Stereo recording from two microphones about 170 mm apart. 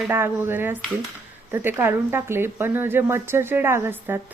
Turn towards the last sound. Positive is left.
turn(degrees=-10)  # may be behind; listen again after turning